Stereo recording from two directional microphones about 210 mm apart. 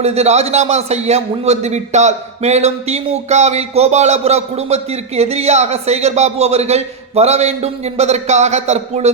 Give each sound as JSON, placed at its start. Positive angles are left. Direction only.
{"t": 0.0, "sound": "a man's voice", "side_deg": -30}